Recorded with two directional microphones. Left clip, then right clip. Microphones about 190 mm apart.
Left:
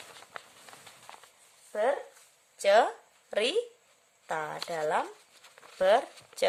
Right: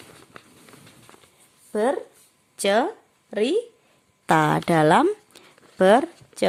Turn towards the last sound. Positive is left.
turn(degrees=-30)  # may be behind; listen again after turning